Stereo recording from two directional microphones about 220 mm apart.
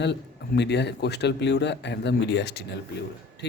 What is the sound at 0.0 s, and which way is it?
A man's voice, 50° left (ahead or behind).